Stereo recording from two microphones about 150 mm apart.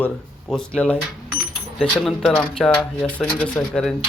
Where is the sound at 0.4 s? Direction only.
5° left (ahead or behind).